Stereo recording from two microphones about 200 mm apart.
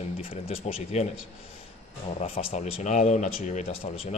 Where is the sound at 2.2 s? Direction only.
30° left (ahead or behind).